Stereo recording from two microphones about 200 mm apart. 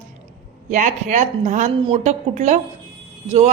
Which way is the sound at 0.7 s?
40° right (ahead or behind).